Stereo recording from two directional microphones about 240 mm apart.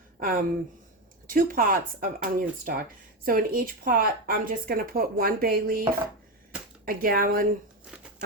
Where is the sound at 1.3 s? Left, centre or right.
Right.